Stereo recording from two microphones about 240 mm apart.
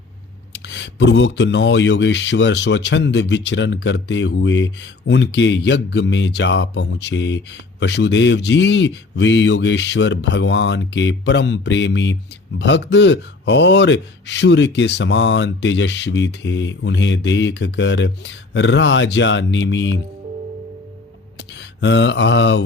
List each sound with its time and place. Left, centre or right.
0.5 s speech: left
21.3 s speech: left